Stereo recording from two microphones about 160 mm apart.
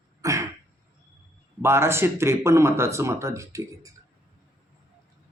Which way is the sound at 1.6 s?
15° right (ahead or behind).